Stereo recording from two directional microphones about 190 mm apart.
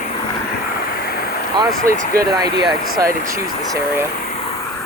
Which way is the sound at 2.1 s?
20° right (ahead or behind).